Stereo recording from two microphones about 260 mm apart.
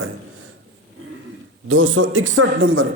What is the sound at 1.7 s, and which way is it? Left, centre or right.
A man's voice, right.